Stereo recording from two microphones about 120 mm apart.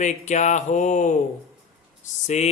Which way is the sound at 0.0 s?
85° left.